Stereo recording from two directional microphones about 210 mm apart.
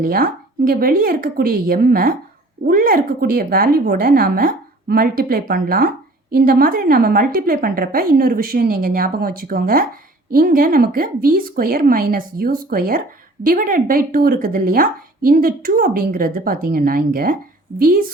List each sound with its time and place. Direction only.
0.0 s speech: 45° right (ahead or behind)